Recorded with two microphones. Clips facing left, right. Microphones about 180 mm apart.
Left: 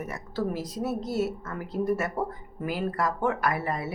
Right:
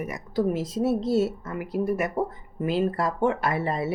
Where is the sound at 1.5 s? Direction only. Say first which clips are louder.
Right 1 dB; 10° right (ahead or behind).